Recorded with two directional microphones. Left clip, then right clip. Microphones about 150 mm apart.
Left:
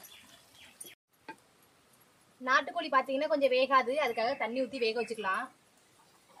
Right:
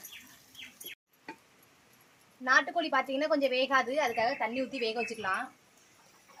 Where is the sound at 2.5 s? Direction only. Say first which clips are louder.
Right 2 dB; 25° left (ahead or behind).